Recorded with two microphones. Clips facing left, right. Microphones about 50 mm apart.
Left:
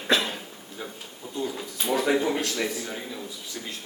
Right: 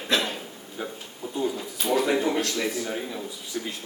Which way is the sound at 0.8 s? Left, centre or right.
Centre.